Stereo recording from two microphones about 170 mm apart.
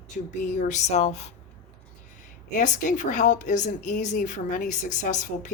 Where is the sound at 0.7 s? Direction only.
40° left (ahead or behind).